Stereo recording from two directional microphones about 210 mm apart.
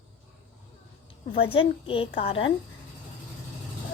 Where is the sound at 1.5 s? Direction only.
25° left (ahead or behind).